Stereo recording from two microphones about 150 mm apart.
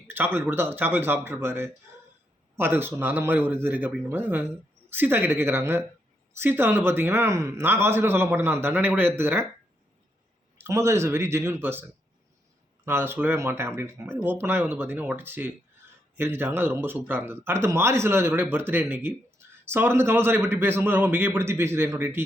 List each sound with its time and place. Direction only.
0.3 s speech: 15° right (ahead or behind)
10.6 s speech: 20° right (ahead or behind)